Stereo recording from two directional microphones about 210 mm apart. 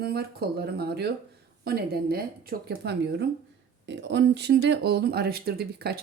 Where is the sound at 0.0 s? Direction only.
50° right (ahead or behind).